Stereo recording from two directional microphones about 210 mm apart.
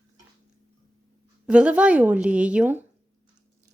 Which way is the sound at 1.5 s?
5° right (ahead or behind).